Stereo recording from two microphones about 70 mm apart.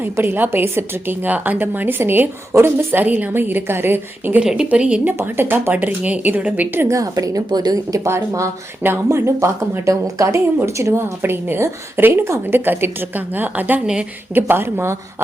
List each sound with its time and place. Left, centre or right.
0.0 s a woman's voice: right
2.7 s a woman's voice: right
4.4 s a woman's voice: centre
5.1 s a woman's voice: right
5.7 s a woman's voice: centre
6.8 s a woman's voice: right
7.9 s a woman's voice: right
11.2 s a woman's voice: right